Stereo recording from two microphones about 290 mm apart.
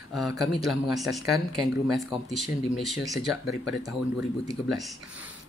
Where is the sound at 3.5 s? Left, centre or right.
Centre.